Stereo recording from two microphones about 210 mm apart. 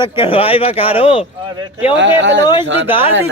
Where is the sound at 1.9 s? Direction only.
60° right (ahead or behind).